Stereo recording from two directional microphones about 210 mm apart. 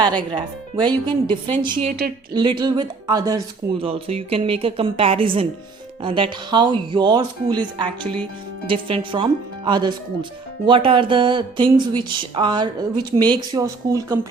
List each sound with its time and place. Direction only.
0.8 s speech: 20° right (ahead or behind)
1.9 s a woman's voice: 45° right (ahead or behind)
2.3 s speech: 20° right (ahead or behind)